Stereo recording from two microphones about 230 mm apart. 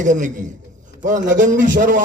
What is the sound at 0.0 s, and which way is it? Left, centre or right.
A man's voice, right.